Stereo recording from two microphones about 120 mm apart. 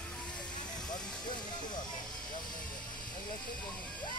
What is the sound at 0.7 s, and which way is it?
Vehicle, 35° left (ahead or behind).